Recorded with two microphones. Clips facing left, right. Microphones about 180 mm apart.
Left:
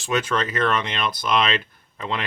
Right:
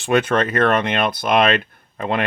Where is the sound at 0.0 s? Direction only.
60° right (ahead or behind).